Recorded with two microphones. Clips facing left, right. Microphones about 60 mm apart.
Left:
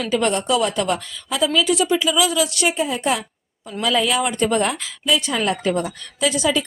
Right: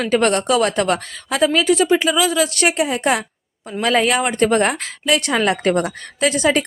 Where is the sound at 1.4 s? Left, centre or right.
Right.